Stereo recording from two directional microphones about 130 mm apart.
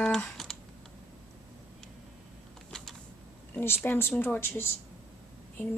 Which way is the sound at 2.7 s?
5° left (ahead or behind).